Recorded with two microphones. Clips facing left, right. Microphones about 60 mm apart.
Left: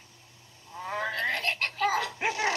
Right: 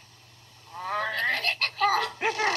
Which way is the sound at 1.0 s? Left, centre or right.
Left.